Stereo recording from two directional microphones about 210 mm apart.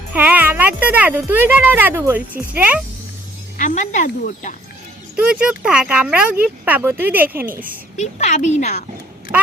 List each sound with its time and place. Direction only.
0.1 s speech: 10° right (ahead or behind)
3.6 s speech: 35° left (ahead or behind)
5.1 s speech: 5° right (ahead or behind)
7.9 s speech: 35° left (ahead or behind)